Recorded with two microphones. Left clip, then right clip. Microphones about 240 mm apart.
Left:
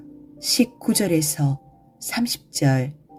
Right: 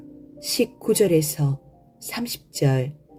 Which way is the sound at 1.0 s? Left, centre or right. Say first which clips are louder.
Right 2 dB; left.